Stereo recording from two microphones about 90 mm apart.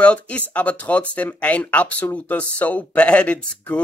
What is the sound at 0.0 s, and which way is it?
Speech, 15° left (ahead or behind).